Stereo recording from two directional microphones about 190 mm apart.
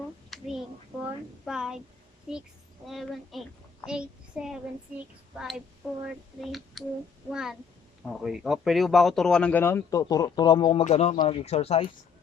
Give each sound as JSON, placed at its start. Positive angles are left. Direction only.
{"t": 0.3, "sound": "hands", "side_deg": 0}
{"t": 1.0, "sound": "a sound", "side_deg": -5}
{"t": 2.8, "sound": "a child's voice", "side_deg": 0}
{"t": 6.8, "sound": "speech", "side_deg": 0}
{"t": 7.3, "sound": "child singing", "side_deg": -5}
{"t": 8.2, "sound": "speech", "side_deg": -5}
{"t": 10.8, "sound": "speech", "side_deg": 35}